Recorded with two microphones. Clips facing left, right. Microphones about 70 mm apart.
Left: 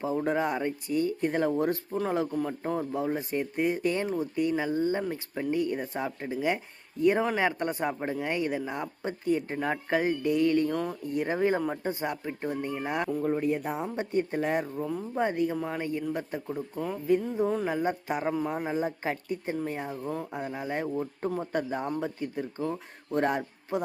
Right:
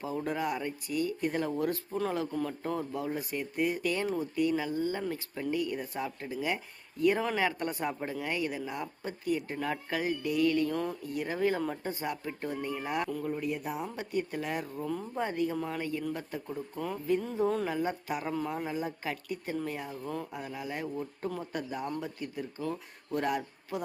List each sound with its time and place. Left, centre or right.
0.0 s speech: left
13.1 s speech: left
16.6 s speech: centre
17.7 s speech: left